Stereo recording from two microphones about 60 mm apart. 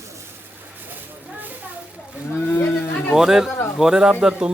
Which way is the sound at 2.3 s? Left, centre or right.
Left.